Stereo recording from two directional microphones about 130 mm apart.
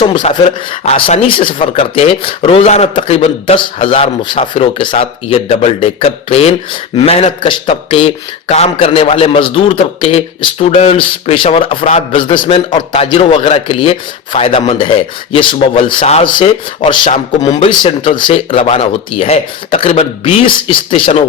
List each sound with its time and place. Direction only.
0.0 s a man's voice: 40° left (ahead or behind)
2.9 s a man's voice: 40° left (ahead or behind)
8.4 s a man's voice: 55° left (ahead or behind)
12.1 s a man's voice: 40° left (ahead or behind)